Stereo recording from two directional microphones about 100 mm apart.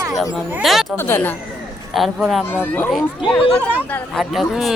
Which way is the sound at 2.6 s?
15° left (ahead or behind).